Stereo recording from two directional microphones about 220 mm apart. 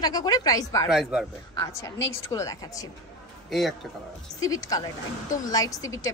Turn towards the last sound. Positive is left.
turn(degrees=15)  # may be behind; listen again after turning